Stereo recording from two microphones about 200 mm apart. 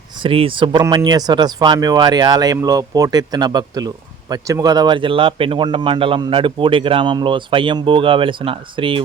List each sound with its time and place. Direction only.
0.2 s speech: 25° right (ahead or behind)